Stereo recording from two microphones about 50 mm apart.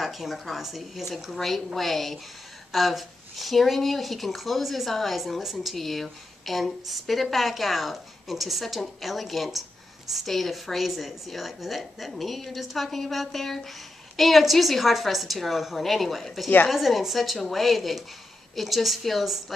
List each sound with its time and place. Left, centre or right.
0.0 s speech: centre